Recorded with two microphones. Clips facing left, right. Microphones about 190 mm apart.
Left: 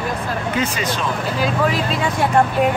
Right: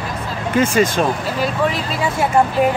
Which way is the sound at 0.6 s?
50° right (ahead or behind).